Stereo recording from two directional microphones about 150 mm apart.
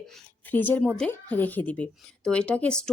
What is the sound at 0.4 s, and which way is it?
Speech, 10° left (ahead or behind).